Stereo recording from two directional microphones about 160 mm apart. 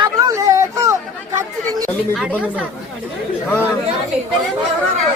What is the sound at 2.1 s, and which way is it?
Speech, 5° right (ahead or behind).